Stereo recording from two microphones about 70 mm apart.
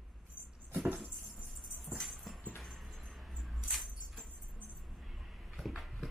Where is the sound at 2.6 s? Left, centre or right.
Centre.